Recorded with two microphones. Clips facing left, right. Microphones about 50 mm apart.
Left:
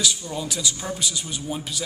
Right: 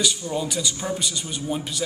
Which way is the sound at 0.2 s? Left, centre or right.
Centre.